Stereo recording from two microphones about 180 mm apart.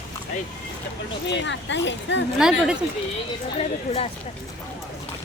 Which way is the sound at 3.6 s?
35° left (ahead or behind).